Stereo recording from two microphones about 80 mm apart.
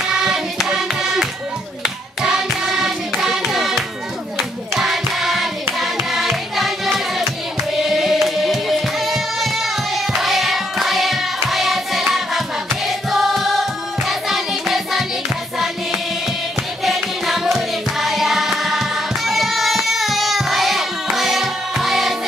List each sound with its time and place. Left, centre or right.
0.2 s hands: centre
2.2 s music: centre
4.4 s hands: centre
7.7 s music: centre
16.8 s music: centre